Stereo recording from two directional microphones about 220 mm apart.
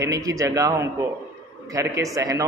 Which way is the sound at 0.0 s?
15° right (ahead or behind).